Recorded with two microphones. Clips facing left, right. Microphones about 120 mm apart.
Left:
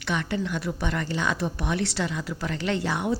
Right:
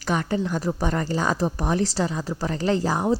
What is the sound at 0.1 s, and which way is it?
Speech, 40° right (ahead or behind).